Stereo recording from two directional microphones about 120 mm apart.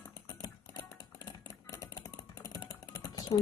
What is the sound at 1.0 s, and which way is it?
Typing, 30° left (ahead or behind).